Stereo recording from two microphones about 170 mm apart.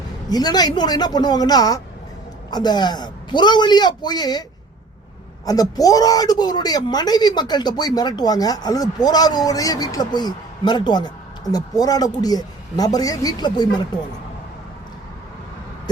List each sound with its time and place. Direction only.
0.3 s speech: 25° left (ahead or behind)
5.5 s speech: 20° left (ahead or behind)